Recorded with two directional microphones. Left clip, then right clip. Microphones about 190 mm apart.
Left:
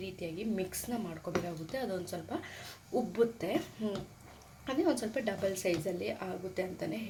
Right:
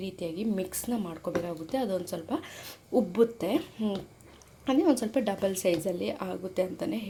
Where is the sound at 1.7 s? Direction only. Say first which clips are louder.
Right 7 dB; 35° right (ahead or behind).